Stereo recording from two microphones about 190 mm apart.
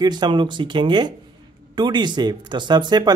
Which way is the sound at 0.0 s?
25° right (ahead or behind).